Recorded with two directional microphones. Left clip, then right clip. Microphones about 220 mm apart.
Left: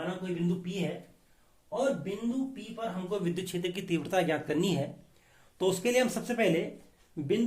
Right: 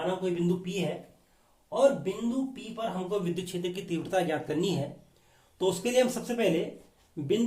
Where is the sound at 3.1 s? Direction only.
15° left (ahead or behind).